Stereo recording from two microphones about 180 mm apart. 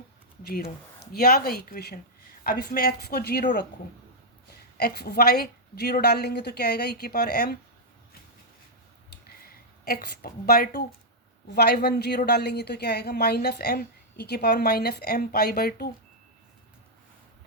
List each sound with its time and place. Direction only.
0.4 s a woman's voice: 60° left (ahead or behind)
4.8 s a woman's voice: 60° left (ahead or behind)
9.0 s a sound: 55° left (ahead or behind)
11.5 s a woman's voice: 65° left (ahead or behind)